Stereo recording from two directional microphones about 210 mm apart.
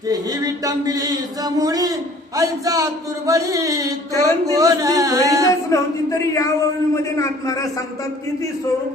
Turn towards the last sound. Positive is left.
turn(degrees=15)  # may be behind; listen again after turning